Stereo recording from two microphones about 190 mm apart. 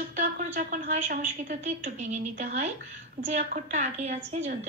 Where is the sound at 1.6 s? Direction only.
40° right (ahead or behind).